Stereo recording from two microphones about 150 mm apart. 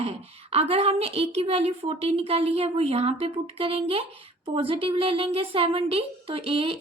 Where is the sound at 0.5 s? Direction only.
40° right (ahead or behind).